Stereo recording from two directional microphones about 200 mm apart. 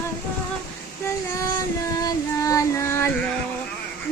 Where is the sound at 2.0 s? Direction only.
15° left (ahead or behind).